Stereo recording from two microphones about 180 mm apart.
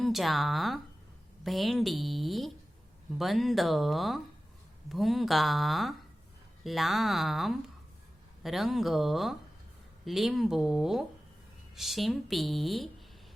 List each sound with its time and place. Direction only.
0.0 s speech: centre (ahead or behind)